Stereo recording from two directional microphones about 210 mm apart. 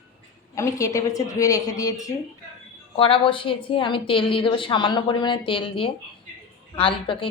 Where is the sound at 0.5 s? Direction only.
15° left (ahead or behind).